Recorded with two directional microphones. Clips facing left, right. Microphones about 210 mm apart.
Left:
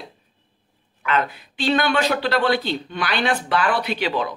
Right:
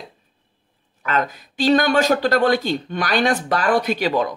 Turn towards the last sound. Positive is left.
turn(degrees=-45)  # may be behind; listen again after turning